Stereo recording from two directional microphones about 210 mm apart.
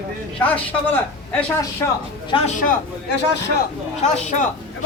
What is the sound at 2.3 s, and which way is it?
Speech, 35° left (ahead or behind).